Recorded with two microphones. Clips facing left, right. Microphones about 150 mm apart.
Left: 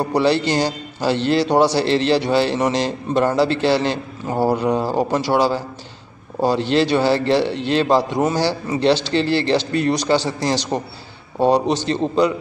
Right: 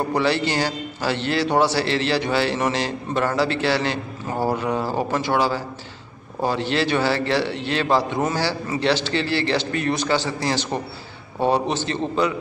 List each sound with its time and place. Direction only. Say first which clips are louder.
0.1 s a man's voice: left 6 dB; 15° left (ahead or behind)